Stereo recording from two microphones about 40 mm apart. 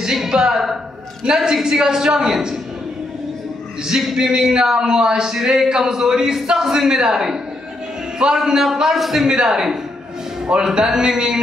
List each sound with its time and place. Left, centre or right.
0.0 s a woman's voice: centre
3.8 s speech: centre
9.3 s speech: centre